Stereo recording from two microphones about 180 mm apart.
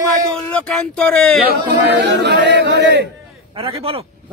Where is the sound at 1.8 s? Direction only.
70° right (ahead or behind).